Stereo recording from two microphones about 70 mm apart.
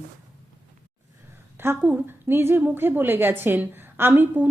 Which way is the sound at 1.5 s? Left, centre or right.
Right.